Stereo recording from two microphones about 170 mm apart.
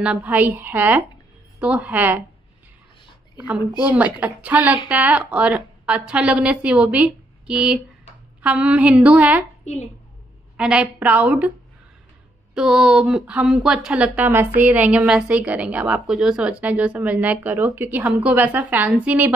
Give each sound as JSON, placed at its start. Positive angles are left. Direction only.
{"t": 0.0, "sound": "a woman's voice", "side_deg": -10}
{"t": 3.9, "sound": "a woman's voice", "side_deg": -10}
{"t": 9.7, "sound": "a child's voice", "side_deg": 40}
{"t": 10.6, "sound": "a woman's voice", "side_deg": -5}
{"t": 12.5, "sound": "a woman's voice", "side_deg": -5}